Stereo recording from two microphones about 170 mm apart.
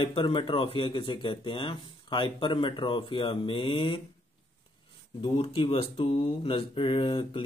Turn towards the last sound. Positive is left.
turn(degrees=30)  # may be behind; listen again after turning